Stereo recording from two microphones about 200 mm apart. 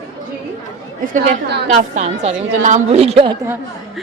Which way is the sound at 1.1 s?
40° right (ahead or behind).